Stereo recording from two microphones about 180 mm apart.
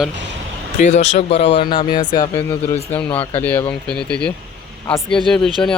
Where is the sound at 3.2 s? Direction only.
10° left (ahead or behind).